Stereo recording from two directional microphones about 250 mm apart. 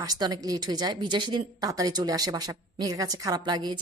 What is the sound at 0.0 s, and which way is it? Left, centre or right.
A woman's voice, centre.